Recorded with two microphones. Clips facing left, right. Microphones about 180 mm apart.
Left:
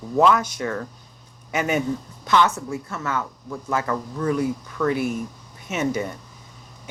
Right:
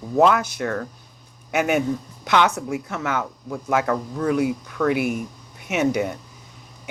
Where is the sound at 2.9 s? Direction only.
75° right (ahead or behind).